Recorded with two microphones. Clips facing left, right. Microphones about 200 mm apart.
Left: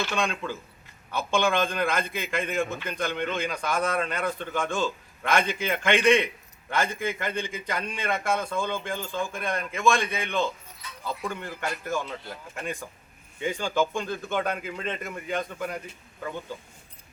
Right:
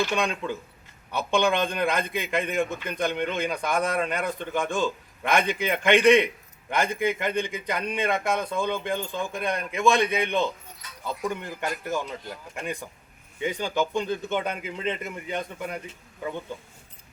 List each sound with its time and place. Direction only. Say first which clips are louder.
0.1 s a man's voice: right 2 dB; 15° right (ahead or behind)